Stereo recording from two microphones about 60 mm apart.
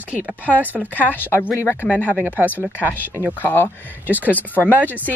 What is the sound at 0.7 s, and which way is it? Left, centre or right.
Speech, left.